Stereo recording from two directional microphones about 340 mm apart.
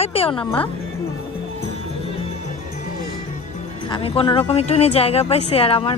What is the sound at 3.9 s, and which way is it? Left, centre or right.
Speech, centre.